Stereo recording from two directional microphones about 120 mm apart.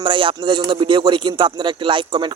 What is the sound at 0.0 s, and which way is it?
Speech, 45° right (ahead or behind).